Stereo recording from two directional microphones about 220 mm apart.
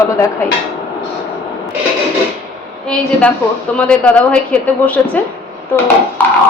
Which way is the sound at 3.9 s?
5° left (ahead or behind).